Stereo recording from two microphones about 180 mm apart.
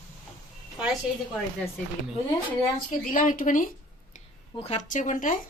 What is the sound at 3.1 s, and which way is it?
Speech, 45° left (ahead or behind).